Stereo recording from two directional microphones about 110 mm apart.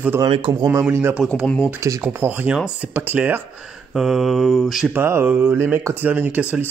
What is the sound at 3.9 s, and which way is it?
Speech, 5° right (ahead or behind).